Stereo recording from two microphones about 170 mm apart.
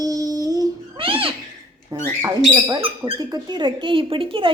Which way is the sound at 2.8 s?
35° right (ahead or behind).